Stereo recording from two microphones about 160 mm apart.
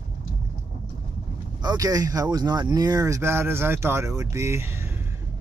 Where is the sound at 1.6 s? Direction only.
20° right (ahead or behind).